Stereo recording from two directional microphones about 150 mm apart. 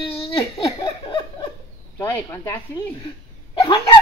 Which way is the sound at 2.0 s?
15° left (ahead or behind).